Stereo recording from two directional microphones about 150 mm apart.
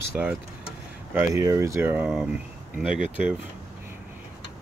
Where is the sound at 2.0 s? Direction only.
Centre (ahead or behind).